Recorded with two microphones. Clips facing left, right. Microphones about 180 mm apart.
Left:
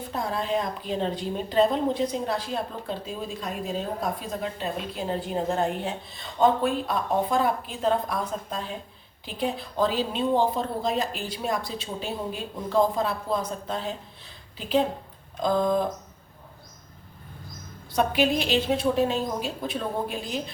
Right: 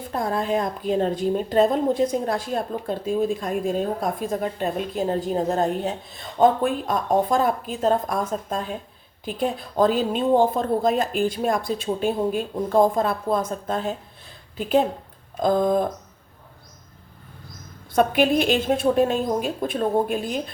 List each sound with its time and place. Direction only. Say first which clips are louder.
0.1 s a woman's voice: right 4 dB; 50° right (ahead or behind)
15.4 s a woman's voice: right 4 dB; 50° right (ahead or behind)
17.9 s a woman's voice: right 4 dB; 50° right (ahead or behind)